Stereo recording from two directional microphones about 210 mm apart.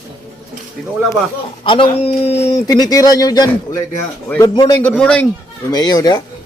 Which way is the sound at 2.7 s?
15° left (ahead or behind).